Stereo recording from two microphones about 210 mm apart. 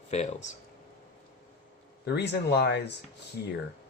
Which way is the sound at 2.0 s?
55° left (ahead or behind).